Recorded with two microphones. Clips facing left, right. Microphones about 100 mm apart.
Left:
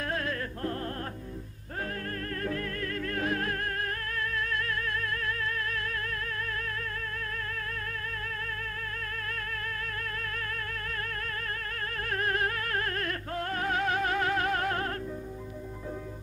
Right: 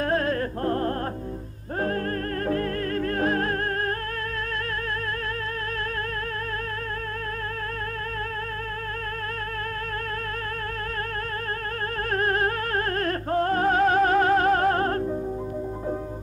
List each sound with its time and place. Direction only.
0.0 s music: 40° right (ahead or behind)
2.4 s music: 40° right (ahead or behind)
12.1 s music: 40° right (ahead or behind)